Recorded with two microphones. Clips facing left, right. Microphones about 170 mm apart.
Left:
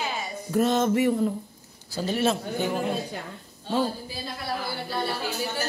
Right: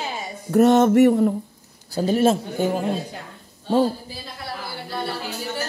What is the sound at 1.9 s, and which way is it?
Speech, 45° right (ahead or behind).